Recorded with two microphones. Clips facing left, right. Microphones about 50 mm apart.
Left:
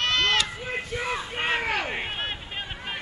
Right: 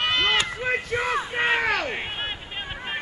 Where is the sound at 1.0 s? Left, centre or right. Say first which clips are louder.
Right 5 dB; right.